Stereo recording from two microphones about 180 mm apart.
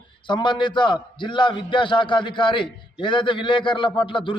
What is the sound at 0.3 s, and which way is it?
A man's voice, 25° left (ahead or behind).